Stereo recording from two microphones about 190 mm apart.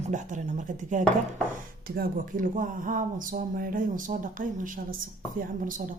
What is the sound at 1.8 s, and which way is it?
Speech, 50° right (ahead or behind).